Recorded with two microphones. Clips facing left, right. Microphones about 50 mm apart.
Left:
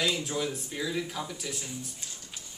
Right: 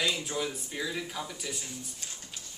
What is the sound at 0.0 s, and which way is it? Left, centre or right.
Speech, centre.